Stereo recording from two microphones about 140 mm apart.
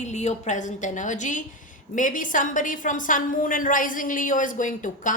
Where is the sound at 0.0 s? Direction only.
55° left (ahead or behind).